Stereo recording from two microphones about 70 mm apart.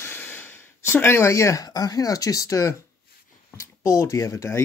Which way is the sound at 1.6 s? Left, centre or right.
Left.